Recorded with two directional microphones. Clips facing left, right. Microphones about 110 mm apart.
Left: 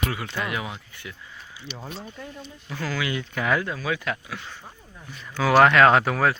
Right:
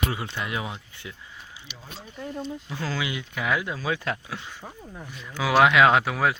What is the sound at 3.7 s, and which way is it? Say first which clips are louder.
Speech: even; 25° right (ahead or behind).